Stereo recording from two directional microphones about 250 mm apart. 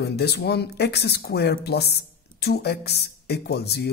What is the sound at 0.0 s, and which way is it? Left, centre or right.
Speech, left.